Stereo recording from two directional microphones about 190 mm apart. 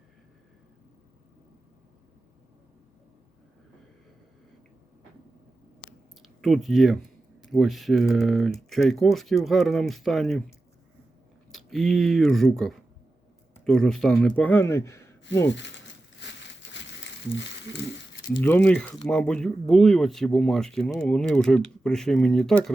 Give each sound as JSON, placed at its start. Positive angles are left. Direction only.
{"t": 6.2, "sound": "speech", "side_deg": 0}
{"t": 11.5, "sound": "speech", "side_deg": 0}
{"t": 15.2, "sound": "crumpling", "side_deg": 70}
{"t": 18.4, "sound": "speech", "side_deg": 10}